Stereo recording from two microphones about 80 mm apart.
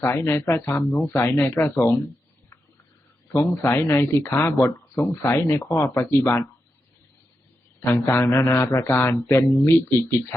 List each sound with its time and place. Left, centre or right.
0.0 s speech: left
3.4 s speech: left
7.9 s speech: left